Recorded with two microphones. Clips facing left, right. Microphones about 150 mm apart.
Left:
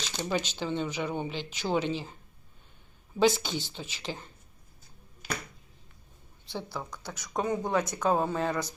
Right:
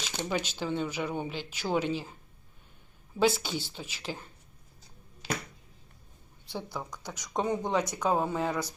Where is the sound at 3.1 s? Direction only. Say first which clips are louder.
Left 2 dB; 5° right (ahead or behind).